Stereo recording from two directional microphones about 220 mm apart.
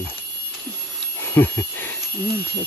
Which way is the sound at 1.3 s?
10° left (ahead or behind).